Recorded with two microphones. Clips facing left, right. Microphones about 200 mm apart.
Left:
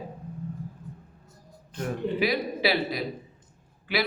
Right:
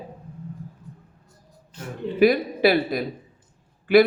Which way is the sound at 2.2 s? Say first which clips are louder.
Right 11 dB; 50° right (ahead or behind).